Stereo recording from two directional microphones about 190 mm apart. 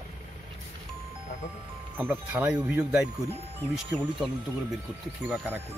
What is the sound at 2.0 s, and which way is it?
Speech, 10° right (ahead or behind).